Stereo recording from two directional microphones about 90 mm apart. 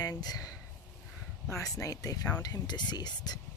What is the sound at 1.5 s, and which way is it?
Speech, 35° left (ahead or behind).